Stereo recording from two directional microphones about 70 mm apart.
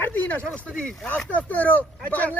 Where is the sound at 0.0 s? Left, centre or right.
Left.